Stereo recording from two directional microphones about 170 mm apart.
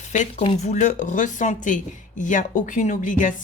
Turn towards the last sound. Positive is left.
turn(degrees=50)  # may be behind; listen again after turning